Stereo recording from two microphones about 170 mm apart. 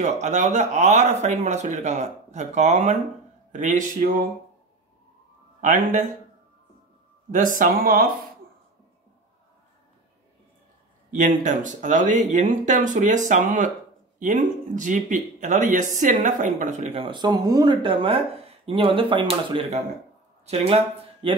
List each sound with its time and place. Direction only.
0.0 s speech: 45° right (ahead or behind)
5.6 s speech: 50° right (ahead or behind)
7.2 s speech: 50° right (ahead or behind)
11.1 s speech: 50° right (ahead or behind); by 21.4 s 35° right (ahead or behind)